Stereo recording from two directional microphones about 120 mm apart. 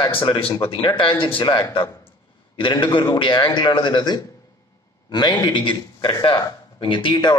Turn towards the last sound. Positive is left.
turn(degrees=40)  # may be behind; listen again after turning